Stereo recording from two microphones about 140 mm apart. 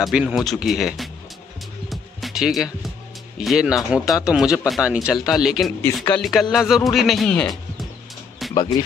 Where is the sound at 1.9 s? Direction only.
Centre (ahead or behind).